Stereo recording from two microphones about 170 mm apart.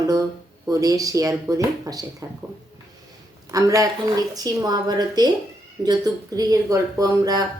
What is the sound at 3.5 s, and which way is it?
Speech, 20° right (ahead or behind).